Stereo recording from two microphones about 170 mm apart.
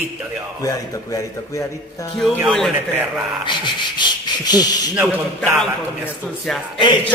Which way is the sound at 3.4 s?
25° left (ahead or behind).